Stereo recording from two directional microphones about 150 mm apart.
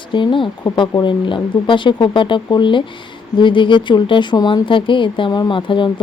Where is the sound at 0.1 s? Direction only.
30° left (ahead or behind).